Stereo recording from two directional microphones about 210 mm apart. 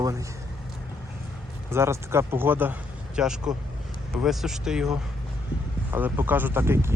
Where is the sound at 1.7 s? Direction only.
10° right (ahead or behind).